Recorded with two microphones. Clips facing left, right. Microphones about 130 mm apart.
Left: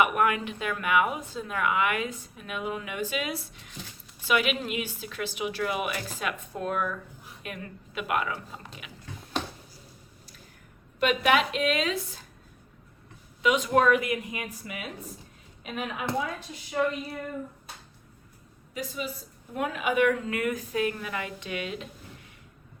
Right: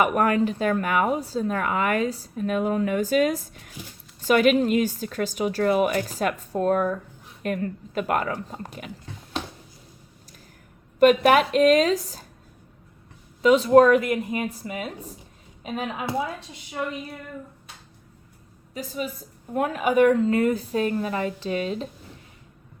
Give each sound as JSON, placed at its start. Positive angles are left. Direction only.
{"t": 0.0, "sound": "speech", "side_deg": -40}
{"t": 11.0, "sound": "speech", "side_deg": -45}
{"t": 13.4, "sound": "speech", "side_deg": -35}
{"t": 16.8, "sound": "speech", "side_deg": -5}
{"t": 18.7, "sound": "speech", "side_deg": -35}